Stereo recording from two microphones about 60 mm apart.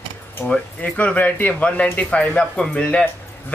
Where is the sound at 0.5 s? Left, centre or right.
Left.